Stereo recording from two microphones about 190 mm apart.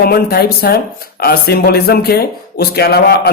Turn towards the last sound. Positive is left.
turn(degrees=55)  # may be behind; listen again after turning